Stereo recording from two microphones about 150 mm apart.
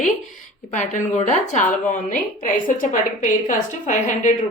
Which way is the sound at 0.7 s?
55° left (ahead or behind).